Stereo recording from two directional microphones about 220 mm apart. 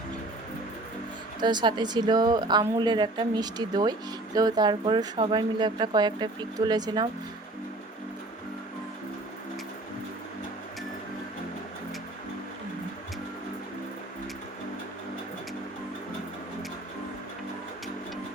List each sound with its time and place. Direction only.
1.4 s speech: 20° right (ahead or behind)